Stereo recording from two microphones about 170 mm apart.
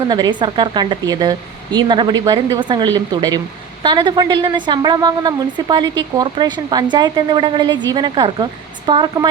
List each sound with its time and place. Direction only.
0.1 s speech: 25° right (ahead or behind)